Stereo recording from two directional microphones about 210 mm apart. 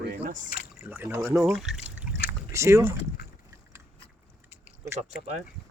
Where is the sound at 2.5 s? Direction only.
15° right (ahead or behind).